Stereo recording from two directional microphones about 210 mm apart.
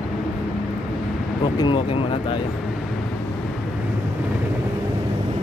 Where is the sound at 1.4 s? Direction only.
25° left (ahead or behind).